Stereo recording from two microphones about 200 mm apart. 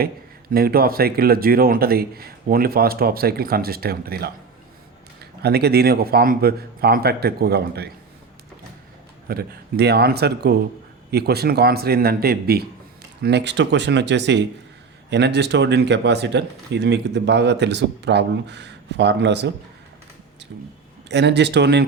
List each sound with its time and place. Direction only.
0.5 s a man's voice: 50° right (ahead or behind)
9.2 s a man's voice: 50° right (ahead or behind)
21.1 s speech: 60° right (ahead or behind)